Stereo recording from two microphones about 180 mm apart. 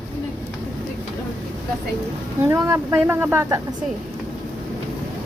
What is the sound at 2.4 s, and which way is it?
A woman's voice, 15° right (ahead or behind).